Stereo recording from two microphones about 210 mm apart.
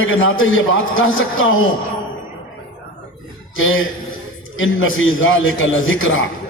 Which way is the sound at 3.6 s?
70° left (ahead or behind).